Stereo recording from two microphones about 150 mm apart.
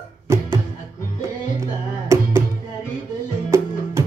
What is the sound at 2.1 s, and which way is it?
Music, 20° right (ahead or behind).